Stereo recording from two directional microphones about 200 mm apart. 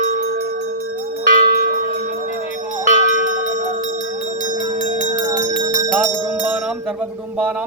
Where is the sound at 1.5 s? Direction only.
55° right (ahead or behind).